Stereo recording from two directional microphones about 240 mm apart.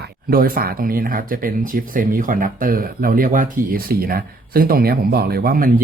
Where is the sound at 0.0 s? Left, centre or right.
Right.